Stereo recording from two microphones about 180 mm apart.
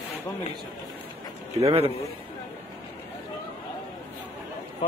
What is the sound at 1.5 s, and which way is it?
Speech, 35° right (ahead or behind).